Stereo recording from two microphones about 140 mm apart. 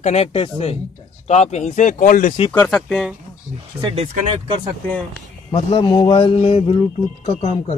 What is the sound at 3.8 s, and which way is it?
Speech, 45° right (ahead or behind).